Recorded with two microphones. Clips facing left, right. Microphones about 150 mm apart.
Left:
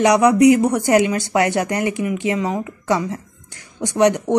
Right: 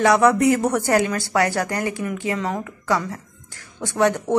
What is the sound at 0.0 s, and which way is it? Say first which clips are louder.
Speech: left 3 dB; 15° left (ahead or behind).